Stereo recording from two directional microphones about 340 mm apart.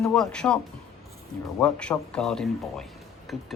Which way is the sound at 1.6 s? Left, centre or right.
Centre.